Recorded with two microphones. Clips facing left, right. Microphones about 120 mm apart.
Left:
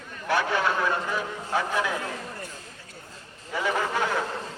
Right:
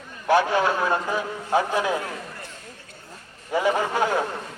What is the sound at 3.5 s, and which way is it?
Speech, 25° right (ahead or behind).